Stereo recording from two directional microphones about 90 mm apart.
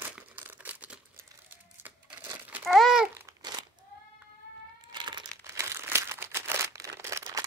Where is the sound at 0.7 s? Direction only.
15° right (ahead or behind).